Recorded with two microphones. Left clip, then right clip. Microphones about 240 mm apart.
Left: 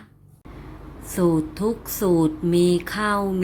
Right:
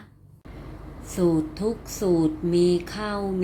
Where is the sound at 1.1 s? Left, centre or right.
Centre.